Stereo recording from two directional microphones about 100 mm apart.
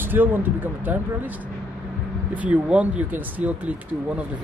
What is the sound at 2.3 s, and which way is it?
Speech, 15° right (ahead or behind).